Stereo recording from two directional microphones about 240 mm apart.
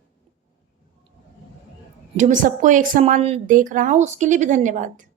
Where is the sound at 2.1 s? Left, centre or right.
Right.